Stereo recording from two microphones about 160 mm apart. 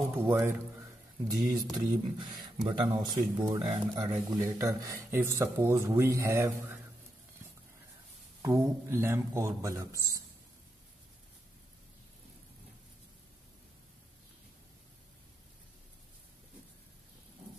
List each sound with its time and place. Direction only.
0.2 s a man's voice: 15° right (ahead or behind)
1.2 s speech: 25° right (ahead or behind)
8.4 s speech: 20° right (ahead or behind)